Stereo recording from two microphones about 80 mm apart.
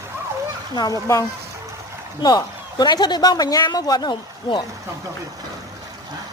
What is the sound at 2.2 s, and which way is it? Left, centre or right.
A man's voice, left.